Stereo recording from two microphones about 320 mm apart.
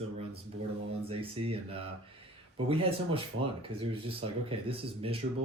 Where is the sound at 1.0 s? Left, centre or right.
Centre.